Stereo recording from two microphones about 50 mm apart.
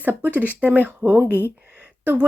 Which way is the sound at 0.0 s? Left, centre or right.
Right.